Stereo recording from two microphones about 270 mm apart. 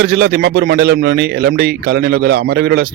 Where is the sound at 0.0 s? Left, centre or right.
Right.